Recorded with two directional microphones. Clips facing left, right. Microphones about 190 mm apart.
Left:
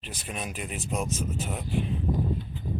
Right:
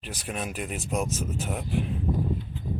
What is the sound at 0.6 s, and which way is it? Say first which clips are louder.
Speech: right 3 dB; 50° right (ahead or behind).